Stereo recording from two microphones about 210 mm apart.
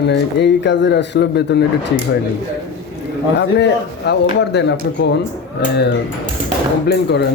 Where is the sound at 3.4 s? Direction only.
55° left (ahead or behind).